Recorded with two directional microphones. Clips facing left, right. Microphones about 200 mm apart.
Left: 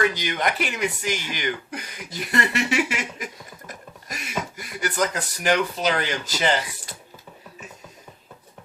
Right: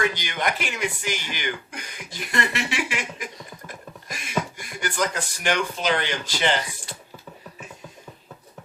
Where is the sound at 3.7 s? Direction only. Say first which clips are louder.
Left 3 dB; 40° left (ahead or behind).